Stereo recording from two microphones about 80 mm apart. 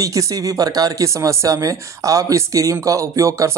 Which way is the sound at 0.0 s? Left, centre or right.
Right.